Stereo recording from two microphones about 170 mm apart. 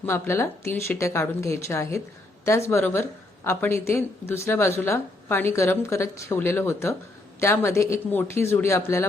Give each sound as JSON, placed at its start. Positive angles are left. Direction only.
{"t": 0.0, "sound": "a woman's voice", "side_deg": 15}